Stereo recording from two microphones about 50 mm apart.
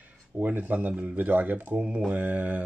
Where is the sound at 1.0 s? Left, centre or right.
Right.